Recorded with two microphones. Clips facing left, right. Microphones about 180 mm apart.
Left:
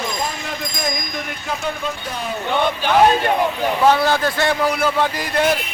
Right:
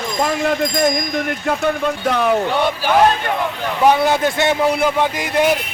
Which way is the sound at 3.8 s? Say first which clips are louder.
Right 2 dB; 20° right (ahead or behind).